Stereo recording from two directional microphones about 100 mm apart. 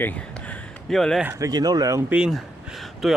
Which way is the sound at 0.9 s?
5° left (ahead or behind).